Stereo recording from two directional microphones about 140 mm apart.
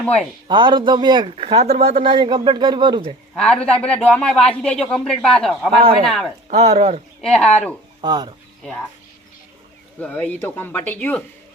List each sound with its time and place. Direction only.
0.0 s speech: 10° left (ahead or behind)
0.4 s speech: 35° right (ahead or behind)
3.3 s speech: 5° left (ahead or behind)
6.5 s speech: 50° right (ahead or behind)
7.2 s speech: 5° left (ahead or behind)
8.0 s speech: 30° right (ahead or behind)
10.0 s speech: 10° left (ahead or behind)